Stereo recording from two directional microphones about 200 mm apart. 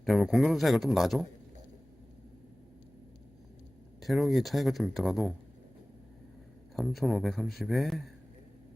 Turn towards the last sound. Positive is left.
turn(degrees=0)  # may be behind; listen again after turning